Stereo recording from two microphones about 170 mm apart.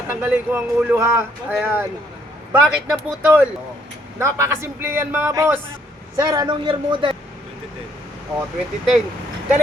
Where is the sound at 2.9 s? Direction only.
5° right (ahead or behind); by 7.1 s 30° right (ahead or behind).